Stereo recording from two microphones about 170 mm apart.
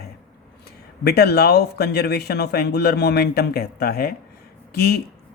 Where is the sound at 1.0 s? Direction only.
70° left (ahead or behind).